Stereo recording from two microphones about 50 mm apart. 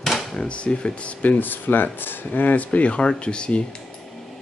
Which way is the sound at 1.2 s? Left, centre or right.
Left.